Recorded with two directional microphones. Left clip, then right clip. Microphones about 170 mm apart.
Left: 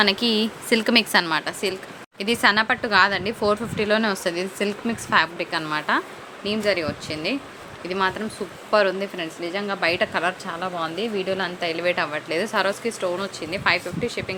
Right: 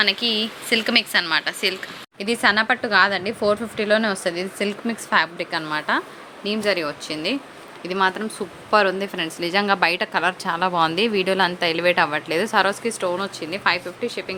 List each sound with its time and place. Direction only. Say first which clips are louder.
0.0 s a woman's voice: even; 25° left (ahead or behind)
1.3 s a woman's voice: right 3 dB; 10° left (ahead or behind); by 14.3 s 10° right (ahead or behind)